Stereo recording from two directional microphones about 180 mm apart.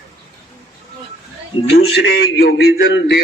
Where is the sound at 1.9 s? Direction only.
70° left (ahead or behind).